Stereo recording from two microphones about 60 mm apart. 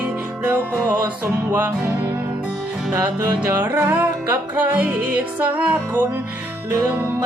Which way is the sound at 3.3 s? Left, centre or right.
Right.